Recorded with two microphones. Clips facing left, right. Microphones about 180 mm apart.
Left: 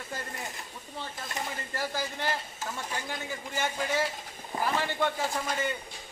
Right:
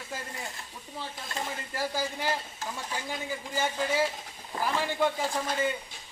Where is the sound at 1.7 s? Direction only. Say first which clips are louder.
Right 3 dB; 10° right (ahead or behind).